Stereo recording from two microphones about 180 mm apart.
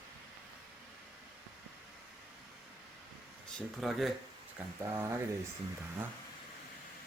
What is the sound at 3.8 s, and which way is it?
Speech, centre (ahead or behind).